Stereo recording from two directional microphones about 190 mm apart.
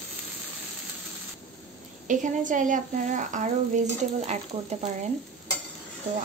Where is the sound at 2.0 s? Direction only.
40° right (ahead or behind).